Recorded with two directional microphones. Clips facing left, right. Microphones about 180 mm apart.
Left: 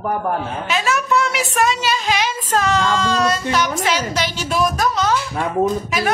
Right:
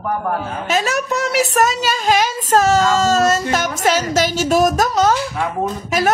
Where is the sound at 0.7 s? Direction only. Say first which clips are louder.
Even; 40° right (ahead or behind).